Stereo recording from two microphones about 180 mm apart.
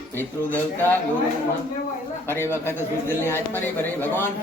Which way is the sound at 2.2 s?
10° left (ahead or behind).